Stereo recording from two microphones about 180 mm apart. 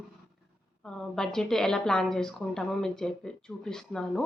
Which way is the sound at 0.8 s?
5° left (ahead or behind).